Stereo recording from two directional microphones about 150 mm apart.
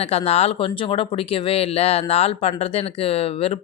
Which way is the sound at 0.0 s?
45° left (ahead or behind).